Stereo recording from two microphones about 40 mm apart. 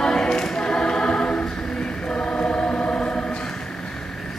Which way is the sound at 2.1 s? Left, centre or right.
Left.